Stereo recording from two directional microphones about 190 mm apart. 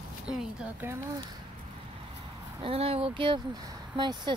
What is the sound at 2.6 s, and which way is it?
Speech, 30° right (ahead or behind).